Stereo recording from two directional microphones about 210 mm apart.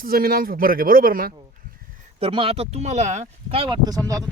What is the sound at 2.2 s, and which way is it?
Speech, 25° right (ahead or behind).